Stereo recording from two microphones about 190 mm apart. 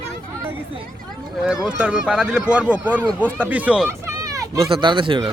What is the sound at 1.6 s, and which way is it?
Speech, 5° right (ahead or behind).